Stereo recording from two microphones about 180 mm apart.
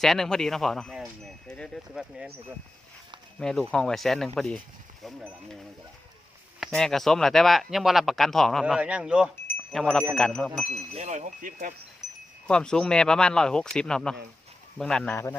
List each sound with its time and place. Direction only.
0.0 s speech: centre (ahead or behind)
3.3 s speech: 5° left (ahead or behind)
9.5 s wind chime: 5° left (ahead or behind)
10.2 s speech: 5° left (ahead or behind)
10.7 s wind chime: 40° right (ahead or behind)
12.0 s wind chime: centre (ahead or behind)
12.5 s speech: 5° left (ahead or behind)